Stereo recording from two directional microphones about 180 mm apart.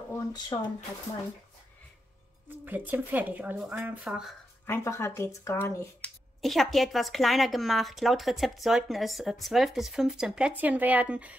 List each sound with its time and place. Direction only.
0.1 s speech: 20° left (ahead or behind)
2.6 s speech: 10° right (ahead or behind)
4.6 s speech: 15° left (ahead or behind); by 11.3 s 10° right (ahead or behind)